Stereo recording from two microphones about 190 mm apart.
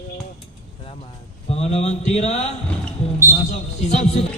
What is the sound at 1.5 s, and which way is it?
Speech, 35° left (ahead or behind).